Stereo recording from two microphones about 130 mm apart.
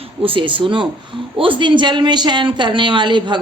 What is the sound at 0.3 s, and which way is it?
Speech, 40° right (ahead or behind).